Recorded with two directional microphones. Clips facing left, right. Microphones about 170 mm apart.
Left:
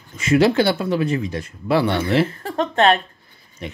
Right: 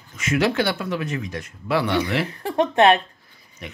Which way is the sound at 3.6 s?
30° left (ahead or behind).